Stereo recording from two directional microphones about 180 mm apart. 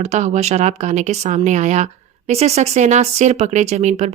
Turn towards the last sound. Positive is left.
turn(degrees=-40)  # may be behind; listen again after turning